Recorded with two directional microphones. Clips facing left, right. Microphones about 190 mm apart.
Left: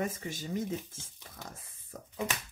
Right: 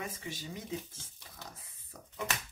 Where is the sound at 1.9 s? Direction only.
50° left (ahead or behind).